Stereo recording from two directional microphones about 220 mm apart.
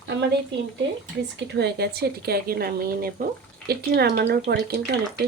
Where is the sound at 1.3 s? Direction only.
50° right (ahead or behind).